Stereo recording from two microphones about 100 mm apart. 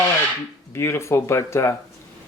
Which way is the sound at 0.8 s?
25° left (ahead or behind).